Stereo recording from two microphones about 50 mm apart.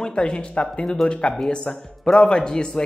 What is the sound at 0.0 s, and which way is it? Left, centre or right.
A woman's voice, centre.